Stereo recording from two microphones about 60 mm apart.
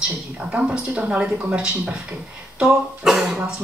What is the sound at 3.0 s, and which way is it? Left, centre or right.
Speech, centre.